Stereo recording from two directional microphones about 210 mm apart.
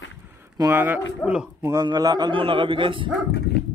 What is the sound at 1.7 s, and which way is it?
A man's voice, 20° right (ahead or behind).